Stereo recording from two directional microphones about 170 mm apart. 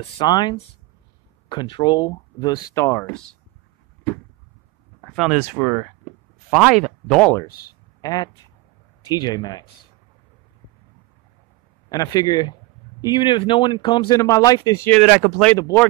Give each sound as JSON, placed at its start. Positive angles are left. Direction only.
{"t": 0.2, "sound": "speech", "side_deg": 25}
{"t": 5.1, "sound": "speech", "side_deg": 0}
{"t": 5.4, "sound": "speech", "side_deg": -15}
{"t": 6.5, "sound": "speech", "side_deg": -5}
{"t": 8.0, "sound": "speech", "side_deg": 25}
{"t": 11.9, "sound": "speech", "side_deg": 20}